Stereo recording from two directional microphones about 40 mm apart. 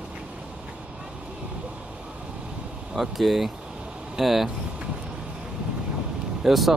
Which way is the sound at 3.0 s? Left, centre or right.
Centre.